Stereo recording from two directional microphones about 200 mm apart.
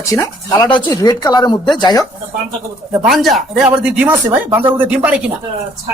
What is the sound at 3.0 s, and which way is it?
Speech, centre (ahead or behind).